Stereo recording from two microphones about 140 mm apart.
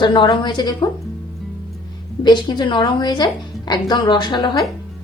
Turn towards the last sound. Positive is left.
turn(degrees=30)  # may be behind; listen again after turning